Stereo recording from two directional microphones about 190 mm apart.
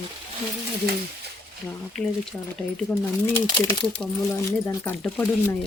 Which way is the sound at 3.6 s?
20° left (ahead or behind).